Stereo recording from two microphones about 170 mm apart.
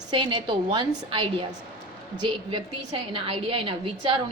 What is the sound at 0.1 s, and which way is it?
A woman's voice, 30° right (ahead or behind).